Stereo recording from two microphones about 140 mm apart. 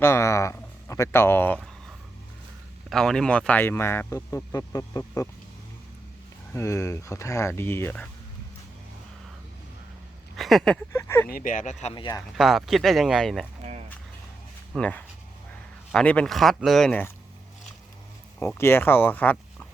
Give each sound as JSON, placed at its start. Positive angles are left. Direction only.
{"t": 0.0, "sound": "speech", "side_deg": 20}
{"t": 1.5, "sound": "a sound", "side_deg": 0}
{"t": 2.9, "sound": "speech", "side_deg": 5}
{"t": 6.5, "sound": "speech", "side_deg": 20}
{"t": 10.3, "sound": "speech", "side_deg": 0}
{"t": 10.9, "sound": "speech", "side_deg": 15}
{"t": 11.3, "sound": "speech", "side_deg": 80}
{"t": 11.9, "sound": "speech", "side_deg": 30}
{"t": 12.4, "sound": "speech", "side_deg": 0}
{"t": 14.8, "sound": "speech", "side_deg": 10}
{"t": 18.3, "sound": "speech", "side_deg": 15}